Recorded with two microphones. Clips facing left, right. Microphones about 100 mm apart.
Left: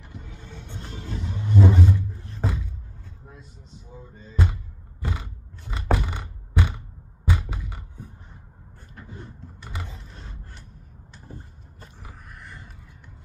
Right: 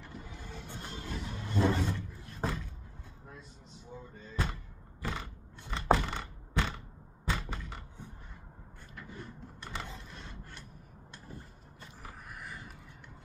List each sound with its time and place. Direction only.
0.3 s vehicle: 5° right (ahead or behind)
0.7 s music: 5° right (ahead or behind)
0.9 s music: 25° left (ahead or behind)
1.2 s music: 15° left (ahead or behind)
3.9 s a sound: 5° left (ahead or behind)
8.9 s vehicle: 30° left (ahead or behind)
9.6 s vehicle: 5° left (ahead or behind)
12.0 s a sound: centre (ahead or behind)